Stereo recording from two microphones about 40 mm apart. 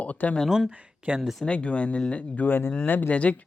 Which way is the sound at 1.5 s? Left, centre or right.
Left.